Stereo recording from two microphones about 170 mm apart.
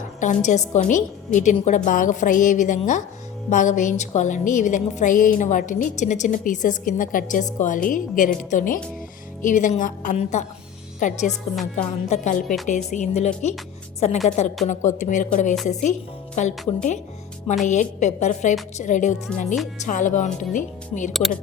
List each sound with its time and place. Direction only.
0.2 s a woman's voice: 45° left (ahead or behind)
11.3 s a woman's voice: centre (ahead or behind)
12.0 s a woman's voice: 40° left (ahead or behind)
17.7 s a woman's voice: 45° left (ahead or behind)
21.1 s a woman's voice: centre (ahead or behind)